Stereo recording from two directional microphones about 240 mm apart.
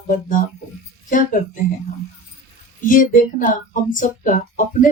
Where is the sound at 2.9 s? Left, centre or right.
Left.